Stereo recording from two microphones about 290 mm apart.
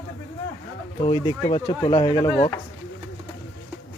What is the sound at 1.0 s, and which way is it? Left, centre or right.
Speech, centre.